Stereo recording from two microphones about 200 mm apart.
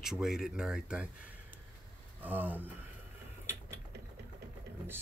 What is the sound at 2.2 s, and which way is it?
Speech, 10° right (ahead or behind).